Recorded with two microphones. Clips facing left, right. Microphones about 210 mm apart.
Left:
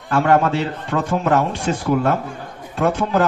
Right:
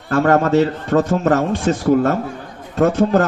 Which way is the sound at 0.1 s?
50° right (ahead or behind).